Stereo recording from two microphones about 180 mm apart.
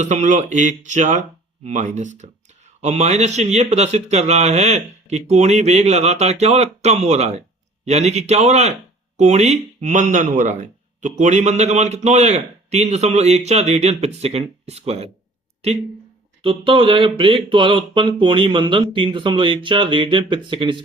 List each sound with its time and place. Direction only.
0.0 s speech: 40° right (ahead or behind)